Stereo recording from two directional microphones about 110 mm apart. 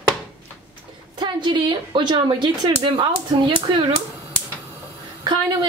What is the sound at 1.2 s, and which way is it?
A woman's voice, 45° right (ahead or behind).